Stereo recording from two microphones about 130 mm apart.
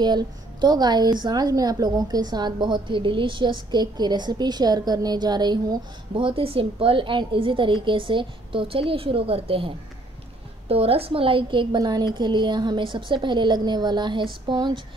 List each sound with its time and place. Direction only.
0.0 s a woman's voice: 35° right (ahead or behind)